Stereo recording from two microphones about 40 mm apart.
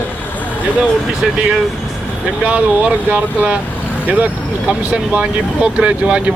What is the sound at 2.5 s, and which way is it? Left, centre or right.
Speech, right.